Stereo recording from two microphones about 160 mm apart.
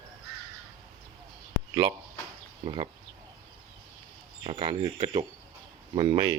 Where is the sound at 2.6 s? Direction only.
30° right (ahead or behind).